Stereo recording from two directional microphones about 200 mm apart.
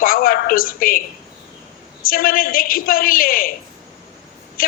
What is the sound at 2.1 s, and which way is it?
A woman's voice, 45° left (ahead or behind).